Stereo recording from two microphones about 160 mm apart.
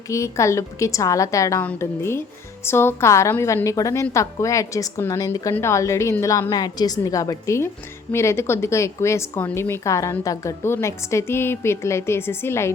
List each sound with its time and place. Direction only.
0.1 s a woman's voice: 20° left (ahead or behind)